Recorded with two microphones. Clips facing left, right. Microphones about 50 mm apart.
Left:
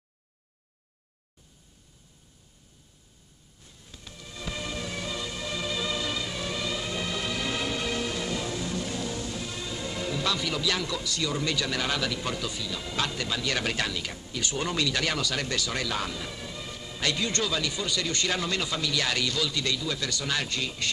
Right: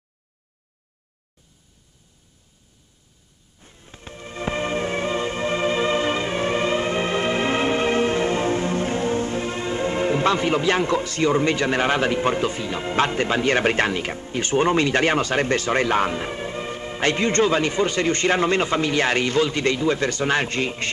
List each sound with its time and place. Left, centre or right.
3.5 s music: right